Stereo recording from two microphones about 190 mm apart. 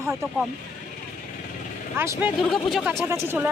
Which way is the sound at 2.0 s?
10° right (ahead or behind).